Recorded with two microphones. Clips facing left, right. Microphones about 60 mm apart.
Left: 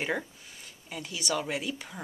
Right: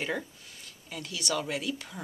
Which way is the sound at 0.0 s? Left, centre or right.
Centre.